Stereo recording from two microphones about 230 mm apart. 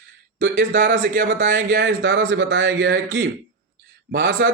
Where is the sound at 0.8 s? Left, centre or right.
Right.